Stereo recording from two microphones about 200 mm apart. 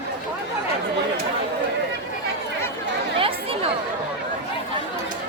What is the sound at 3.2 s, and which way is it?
Chatter, 25° right (ahead or behind).